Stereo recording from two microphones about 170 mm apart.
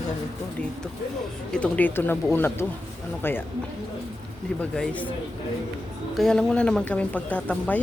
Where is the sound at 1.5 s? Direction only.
5° left (ahead or behind).